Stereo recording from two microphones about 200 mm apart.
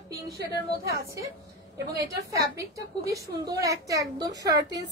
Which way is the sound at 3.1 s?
15° right (ahead or behind).